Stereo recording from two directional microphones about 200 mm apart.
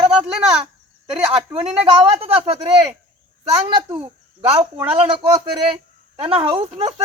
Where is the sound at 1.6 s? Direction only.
30° right (ahead or behind).